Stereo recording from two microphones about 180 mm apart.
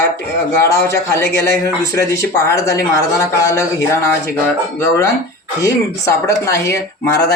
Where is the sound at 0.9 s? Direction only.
15° left (ahead or behind).